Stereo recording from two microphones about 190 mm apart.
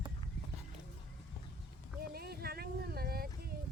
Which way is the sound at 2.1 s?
55° right (ahead or behind).